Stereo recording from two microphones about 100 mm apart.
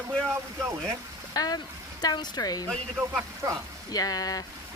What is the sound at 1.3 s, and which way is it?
Speech, 40° left (ahead or behind).